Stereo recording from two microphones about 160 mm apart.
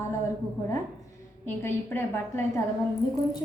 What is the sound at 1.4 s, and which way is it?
A woman's voice, 15° left (ahead or behind).